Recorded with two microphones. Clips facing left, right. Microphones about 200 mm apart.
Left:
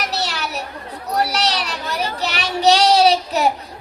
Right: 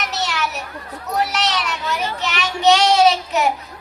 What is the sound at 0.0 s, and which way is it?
Children playing, 35° left (ahead or behind).